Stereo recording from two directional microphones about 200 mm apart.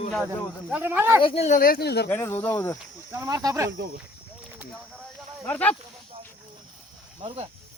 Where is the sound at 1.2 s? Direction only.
30° left (ahead or behind); by 2.0 s 55° left (ahead or behind).